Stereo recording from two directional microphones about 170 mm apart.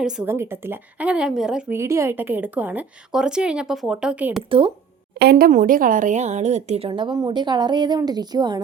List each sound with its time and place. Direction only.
0.0 s a woman's voice: 5° right (ahead or behind)
1.8 s a woman's voice: 15° right (ahead or behind)
4.4 s speech: 30° right (ahead or behind)
5.2 s a woman's voice: 70° right (ahead or behind)
5.5 s a woman's voice: 50° right (ahead or behind); by 8.6 s 25° right (ahead or behind)